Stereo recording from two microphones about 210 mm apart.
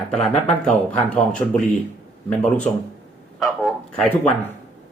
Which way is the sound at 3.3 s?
Centre (ahead or behind).